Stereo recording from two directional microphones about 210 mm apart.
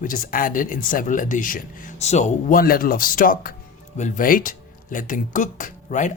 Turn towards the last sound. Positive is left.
turn(degrees=35)  # may be behind; listen again after turning